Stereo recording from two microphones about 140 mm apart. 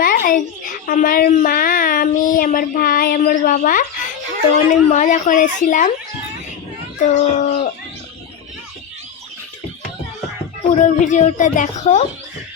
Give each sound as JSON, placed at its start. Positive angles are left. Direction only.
{"t": 0.0, "sound": "a child's voice", "side_deg": 90}
{"t": 7.0, "sound": "speech", "side_deg": 60}
{"t": 10.8, "sound": "speech", "side_deg": 60}